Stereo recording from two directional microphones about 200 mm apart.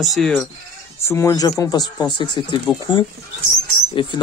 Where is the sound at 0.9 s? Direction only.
15° left (ahead or behind).